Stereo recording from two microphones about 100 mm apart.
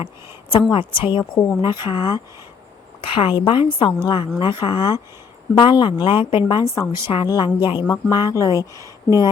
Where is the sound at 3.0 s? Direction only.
60° left (ahead or behind).